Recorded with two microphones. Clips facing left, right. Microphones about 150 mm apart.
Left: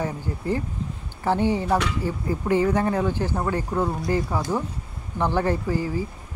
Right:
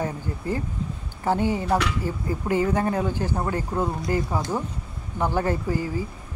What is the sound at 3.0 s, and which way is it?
Speech, 15° right (ahead or behind).